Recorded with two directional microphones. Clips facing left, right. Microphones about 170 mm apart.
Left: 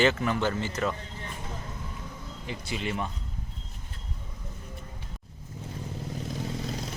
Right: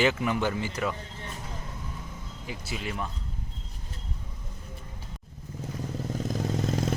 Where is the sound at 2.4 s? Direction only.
5° right (ahead or behind).